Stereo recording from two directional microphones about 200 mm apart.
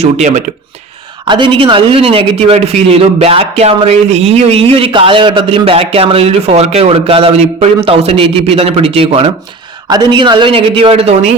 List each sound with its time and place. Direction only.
0.0 s speech: 35° right (ahead or behind)
1.3 s speech: 25° right (ahead or behind)